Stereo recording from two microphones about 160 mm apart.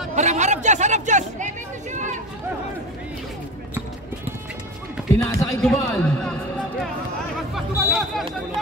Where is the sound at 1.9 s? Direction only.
50° right (ahead or behind).